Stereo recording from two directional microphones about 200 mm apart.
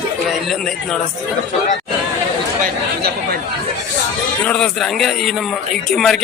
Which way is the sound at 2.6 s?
50° right (ahead or behind).